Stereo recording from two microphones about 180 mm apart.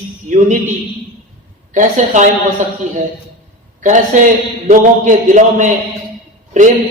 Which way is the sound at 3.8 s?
45° right (ahead or behind).